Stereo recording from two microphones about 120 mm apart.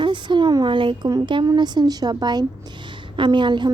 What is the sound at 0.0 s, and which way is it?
A woman's voice, 40° right (ahead or behind).